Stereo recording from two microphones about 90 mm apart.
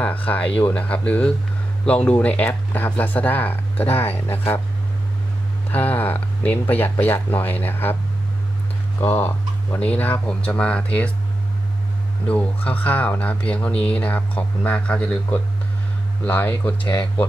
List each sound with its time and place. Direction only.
0.0 s speech: 15° left (ahead or behind)
5.7 s speech: 20° left (ahead or behind)
9.0 s speech: 20° left (ahead or behind)
12.3 s speech: 15° left (ahead or behind)